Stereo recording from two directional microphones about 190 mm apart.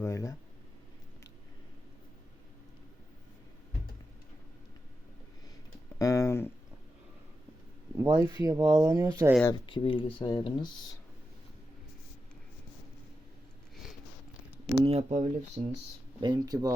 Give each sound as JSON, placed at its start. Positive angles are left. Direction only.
{"t": 0.0, "sound": "speech", "side_deg": 15}
{"t": 6.0, "sound": "a sound", "side_deg": 15}
{"t": 8.0, "sound": "speech", "side_deg": -20}
{"t": 8.4, "sound": "speech", "side_deg": -10}
{"t": 9.6, "sound": "speech", "side_deg": 25}
{"t": 14.8, "sound": "speech", "side_deg": -35}
{"t": 16.2, "sound": "speech", "side_deg": -20}